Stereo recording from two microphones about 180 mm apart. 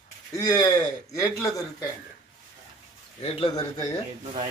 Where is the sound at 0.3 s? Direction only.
20° left (ahead or behind).